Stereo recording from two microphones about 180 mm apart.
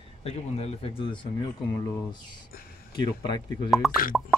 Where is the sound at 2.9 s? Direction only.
25° left (ahead or behind).